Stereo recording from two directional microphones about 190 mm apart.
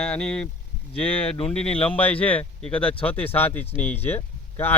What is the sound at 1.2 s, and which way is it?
Speech, 30° left (ahead or behind).